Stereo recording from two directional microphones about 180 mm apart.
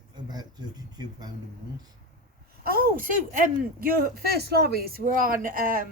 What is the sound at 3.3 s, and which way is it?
Speech, 50° right (ahead or behind).